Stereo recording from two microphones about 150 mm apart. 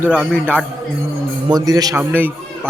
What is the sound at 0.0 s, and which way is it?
Speech, 10° right (ahead or behind).